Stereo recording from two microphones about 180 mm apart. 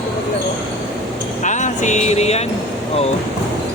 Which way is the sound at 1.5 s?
40° left (ahead or behind).